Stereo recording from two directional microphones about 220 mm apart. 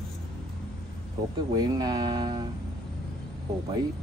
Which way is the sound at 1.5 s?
20° right (ahead or behind).